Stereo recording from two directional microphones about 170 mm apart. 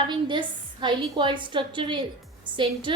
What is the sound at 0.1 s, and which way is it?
A woman's voice, 30° right (ahead or behind).